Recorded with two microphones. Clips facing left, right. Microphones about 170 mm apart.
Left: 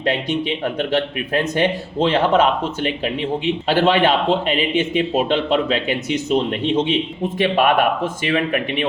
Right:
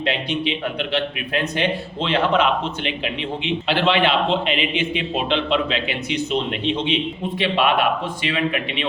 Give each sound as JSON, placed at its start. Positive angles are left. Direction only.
{"t": 0.0, "sound": "speech", "side_deg": 45}
{"t": 2.0, "sound": "speech", "side_deg": 45}